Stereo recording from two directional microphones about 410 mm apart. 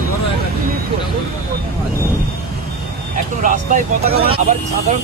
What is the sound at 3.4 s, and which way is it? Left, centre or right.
Speech, centre.